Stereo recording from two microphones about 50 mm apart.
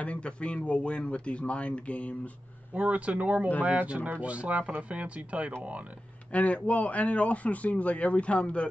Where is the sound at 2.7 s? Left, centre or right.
Right.